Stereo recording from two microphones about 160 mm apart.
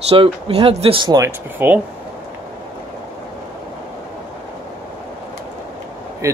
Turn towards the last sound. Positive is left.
turn(degrees=-20)  # may be behind; listen again after turning